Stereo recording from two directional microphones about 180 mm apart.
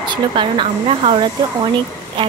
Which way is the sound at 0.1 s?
25° right (ahead or behind).